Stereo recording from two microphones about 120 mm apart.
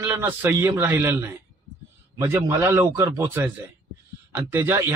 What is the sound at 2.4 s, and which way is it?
Speech, 20° right (ahead or behind).